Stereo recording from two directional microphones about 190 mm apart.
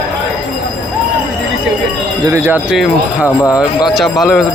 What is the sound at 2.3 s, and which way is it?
Speech, 15° right (ahead or behind).